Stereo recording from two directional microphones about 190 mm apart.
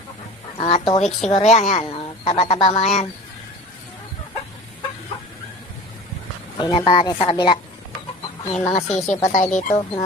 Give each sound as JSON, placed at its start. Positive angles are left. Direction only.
{"t": 0.6, "sound": "speech", "side_deg": 30}
{"t": 2.6, "sound": "speech", "side_deg": 20}
{"t": 2.8, "sound": "speech", "side_deg": 35}
{"t": 6.6, "sound": "speech", "side_deg": 25}
{"t": 8.7, "sound": "speech", "side_deg": 35}